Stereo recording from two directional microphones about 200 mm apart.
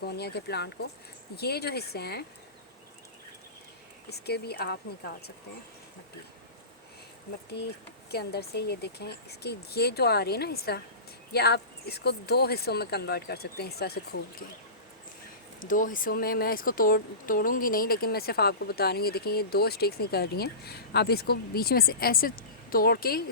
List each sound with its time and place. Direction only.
0.0 s speech: 55° left (ahead or behind)
4.1 s speech: 55° left (ahead or behind)
8.1 s speech: 55° left (ahead or behind)
15.6 s speech: 40° left (ahead or behind)